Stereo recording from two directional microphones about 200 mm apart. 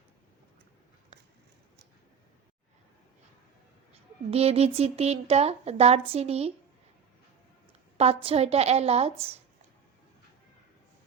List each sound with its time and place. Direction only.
3.9 s speech: 30° right (ahead or behind)
7.9 s speech: 30° right (ahead or behind)